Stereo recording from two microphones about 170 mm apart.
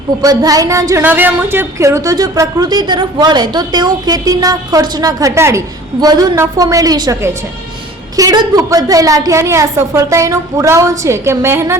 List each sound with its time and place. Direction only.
0.2 s a woman's voice: 20° right (ahead or behind)